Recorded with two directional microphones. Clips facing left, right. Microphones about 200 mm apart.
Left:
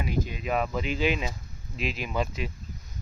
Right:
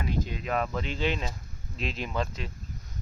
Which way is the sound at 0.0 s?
10° left (ahead or behind).